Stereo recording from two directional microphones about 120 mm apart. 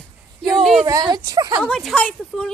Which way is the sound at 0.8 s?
30° right (ahead or behind).